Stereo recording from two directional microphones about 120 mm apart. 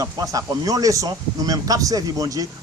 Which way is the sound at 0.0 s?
30° right (ahead or behind).